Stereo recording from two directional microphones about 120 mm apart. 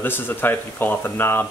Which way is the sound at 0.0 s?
15° left (ahead or behind).